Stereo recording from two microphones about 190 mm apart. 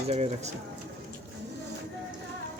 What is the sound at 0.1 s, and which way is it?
Speech, 35° right (ahead or behind).